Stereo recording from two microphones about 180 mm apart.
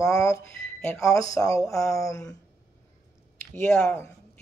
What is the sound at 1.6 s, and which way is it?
Speech, centre (ahead or behind).